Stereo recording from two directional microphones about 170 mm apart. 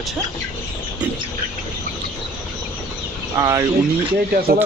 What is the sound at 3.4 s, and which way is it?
Speech, 20° right (ahead or behind).